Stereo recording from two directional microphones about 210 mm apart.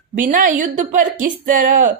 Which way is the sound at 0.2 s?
40° right (ahead or behind).